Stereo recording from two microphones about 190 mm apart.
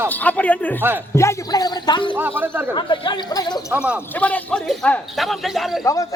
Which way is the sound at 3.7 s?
5° right (ahead or behind).